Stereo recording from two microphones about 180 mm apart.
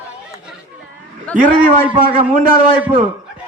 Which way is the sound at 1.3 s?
45° right (ahead or behind).